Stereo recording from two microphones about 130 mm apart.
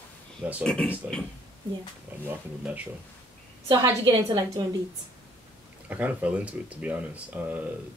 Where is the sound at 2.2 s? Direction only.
10° right (ahead or behind).